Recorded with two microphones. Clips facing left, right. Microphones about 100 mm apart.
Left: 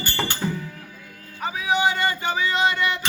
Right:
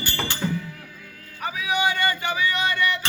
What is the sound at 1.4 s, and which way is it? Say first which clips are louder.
Speech: left 2 dB; 25° left (ahead or behind).